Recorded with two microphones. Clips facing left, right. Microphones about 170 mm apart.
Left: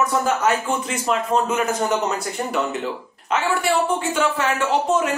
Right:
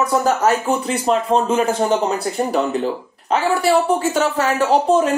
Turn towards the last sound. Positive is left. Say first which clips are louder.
# right 5 dB
turn(degrees=-35)  # may be behind; listen again after turning